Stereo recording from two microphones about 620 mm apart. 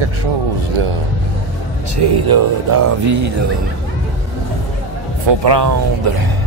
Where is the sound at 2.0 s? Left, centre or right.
Right.